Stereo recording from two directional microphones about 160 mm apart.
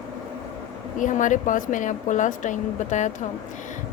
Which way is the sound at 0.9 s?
55° left (ahead or behind).